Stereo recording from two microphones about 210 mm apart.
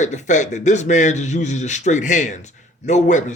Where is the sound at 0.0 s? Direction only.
35° left (ahead or behind).